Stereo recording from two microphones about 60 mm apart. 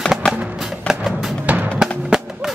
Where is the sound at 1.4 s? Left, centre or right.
Right.